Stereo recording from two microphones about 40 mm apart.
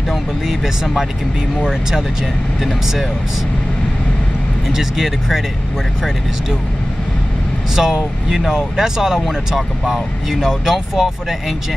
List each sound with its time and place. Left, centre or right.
0.1 s a sound: centre
1.6 s speech: centre
2.6 s speech: centre
4.6 s speech: centre
7.7 s speech: centre
9.6 s speech: centre
10.3 s speech: centre